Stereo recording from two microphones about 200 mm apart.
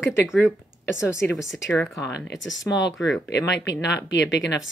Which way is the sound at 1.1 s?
15° left (ahead or behind).